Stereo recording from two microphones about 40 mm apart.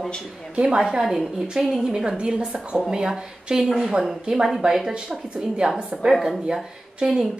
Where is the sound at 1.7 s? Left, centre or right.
Centre.